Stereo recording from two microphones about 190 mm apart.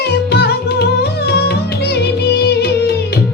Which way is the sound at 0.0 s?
60° left (ahead or behind).